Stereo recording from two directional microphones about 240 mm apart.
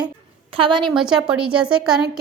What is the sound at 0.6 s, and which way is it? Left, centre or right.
Speech, right.